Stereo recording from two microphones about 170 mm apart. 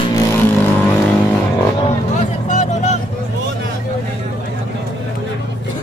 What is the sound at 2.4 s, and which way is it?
Music, 45° left (ahead or behind).